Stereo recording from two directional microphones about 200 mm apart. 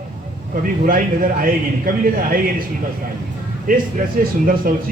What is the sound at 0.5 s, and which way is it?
A man's voice, 45° right (ahead or behind).